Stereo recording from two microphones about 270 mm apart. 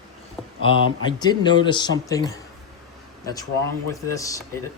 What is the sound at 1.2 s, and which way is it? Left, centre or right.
Speech, centre.